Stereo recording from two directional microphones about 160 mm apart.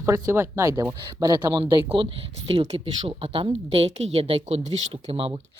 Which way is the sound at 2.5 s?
35° right (ahead or behind).